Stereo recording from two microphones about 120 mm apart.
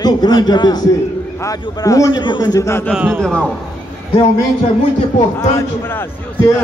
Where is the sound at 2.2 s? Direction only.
40° left (ahead or behind).